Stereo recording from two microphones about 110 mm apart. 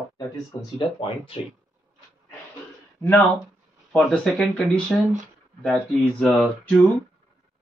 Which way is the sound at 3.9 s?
5° left (ahead or behind).